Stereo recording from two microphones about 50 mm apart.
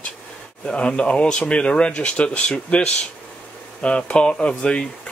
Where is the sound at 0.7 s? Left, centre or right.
Left.